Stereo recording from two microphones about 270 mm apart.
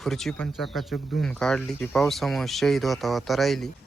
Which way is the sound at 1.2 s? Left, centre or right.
Centre.